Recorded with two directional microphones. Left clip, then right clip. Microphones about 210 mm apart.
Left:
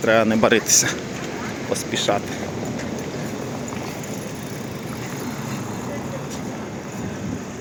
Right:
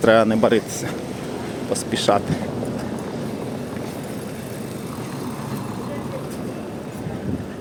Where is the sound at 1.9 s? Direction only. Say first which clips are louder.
Right 3 dB; 20° right (ahead or behind).